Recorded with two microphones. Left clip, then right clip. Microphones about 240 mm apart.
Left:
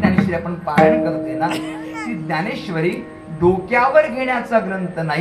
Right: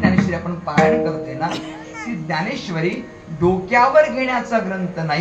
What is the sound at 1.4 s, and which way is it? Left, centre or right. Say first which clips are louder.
Speech: left 2 dB; left.